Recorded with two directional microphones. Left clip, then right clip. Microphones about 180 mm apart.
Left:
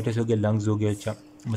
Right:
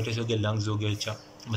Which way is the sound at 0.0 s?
40° left (ahead or behind).